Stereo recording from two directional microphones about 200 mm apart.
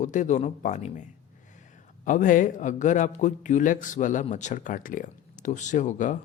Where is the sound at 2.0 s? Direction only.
40° left (ahead or behind).